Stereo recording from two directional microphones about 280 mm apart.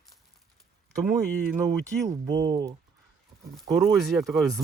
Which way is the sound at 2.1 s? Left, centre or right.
Centre.